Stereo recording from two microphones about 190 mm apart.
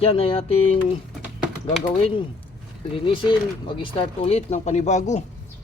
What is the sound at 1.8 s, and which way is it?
Speech, 30° left (ahead or behind).